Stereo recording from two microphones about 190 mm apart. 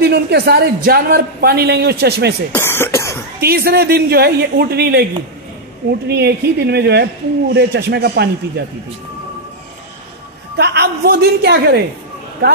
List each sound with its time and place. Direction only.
0.0 s a man's voice: 55° right (ahead or behind)
2.5 s speech: 10° left (ahead or behind)
3.3 s a man's voice: 55° right (ahead or behind)
10.6 s a man's voice: 60° right (ahead or behind)